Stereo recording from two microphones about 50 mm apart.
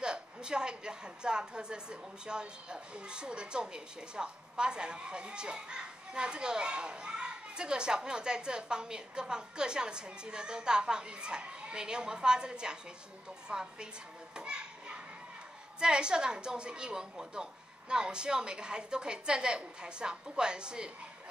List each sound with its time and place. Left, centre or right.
0.0 s a woman's voice: centre
14.3 s children playing: centre
15.8 s a woman's voice: centre